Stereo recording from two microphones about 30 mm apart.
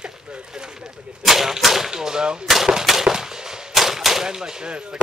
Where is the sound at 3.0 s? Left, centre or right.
Centre.